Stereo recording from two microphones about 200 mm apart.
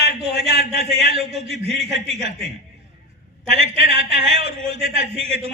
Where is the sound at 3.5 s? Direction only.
30° right (ahead or behind).